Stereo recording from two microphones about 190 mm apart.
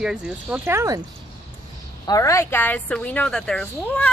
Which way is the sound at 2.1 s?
15° left (ahead or behind).